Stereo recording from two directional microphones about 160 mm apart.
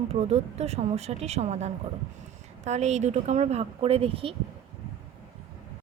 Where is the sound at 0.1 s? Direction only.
40° right (ahead or behind).